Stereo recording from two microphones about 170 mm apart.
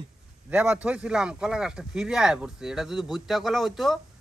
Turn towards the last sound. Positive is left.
turn(degrees=0)  # may be behind; listen again after turning